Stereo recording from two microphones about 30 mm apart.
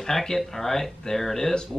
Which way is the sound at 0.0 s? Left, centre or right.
Centre.